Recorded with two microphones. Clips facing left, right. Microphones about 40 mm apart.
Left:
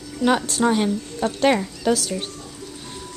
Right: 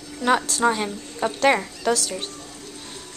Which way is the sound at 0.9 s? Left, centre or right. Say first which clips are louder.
Left 3 dB; centre.